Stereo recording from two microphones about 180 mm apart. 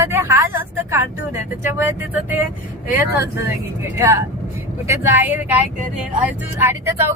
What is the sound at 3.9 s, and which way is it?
Speech, 15° right (ahead or behind).